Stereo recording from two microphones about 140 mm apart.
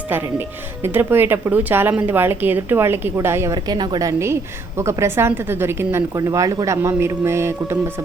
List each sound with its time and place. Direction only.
0.1 s speech: 15° right (ahead or behind)